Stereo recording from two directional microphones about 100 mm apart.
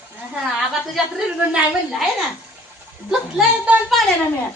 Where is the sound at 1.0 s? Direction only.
5° right (ahead or behind).